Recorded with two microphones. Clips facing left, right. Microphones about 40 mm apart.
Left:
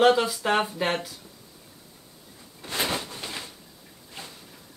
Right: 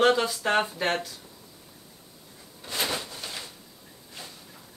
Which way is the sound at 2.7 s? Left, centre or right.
Left.